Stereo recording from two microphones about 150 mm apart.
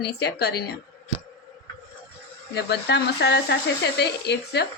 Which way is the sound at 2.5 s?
90° left.